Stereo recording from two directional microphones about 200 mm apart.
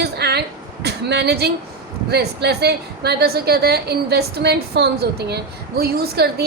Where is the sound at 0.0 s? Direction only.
55° right (ahead or behind).